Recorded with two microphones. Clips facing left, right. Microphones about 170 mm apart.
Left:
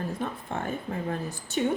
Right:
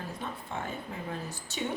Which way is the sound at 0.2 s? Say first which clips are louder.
Left 5 dB; 50° left (ahead or behind).